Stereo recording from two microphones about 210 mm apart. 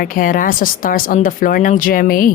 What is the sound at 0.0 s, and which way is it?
Speech, 40° left (ahead or behind).